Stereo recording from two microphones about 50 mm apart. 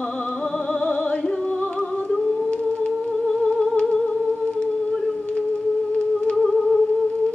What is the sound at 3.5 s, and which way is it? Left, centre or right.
Music, left.